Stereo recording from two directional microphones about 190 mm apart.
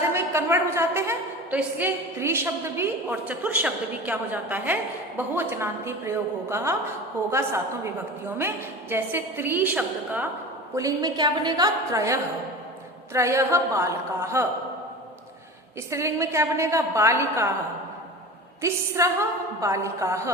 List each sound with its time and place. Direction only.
0.1 s a woman's voice: 15° right (ahead or behind)
10.8 s a woman's voice: 20° right (ahead or behind)
15.9 s a woman's voice: 15° right (ahead or behind)
18.6 s a woman's voice: 15° right (ahead or behind)